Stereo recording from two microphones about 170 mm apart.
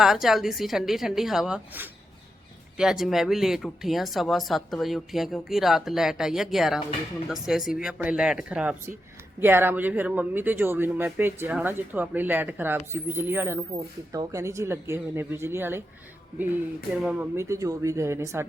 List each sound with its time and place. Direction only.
0.0 s speech: centre (ahead or behind)
17.0 s speech: 10° right (ahead or behind)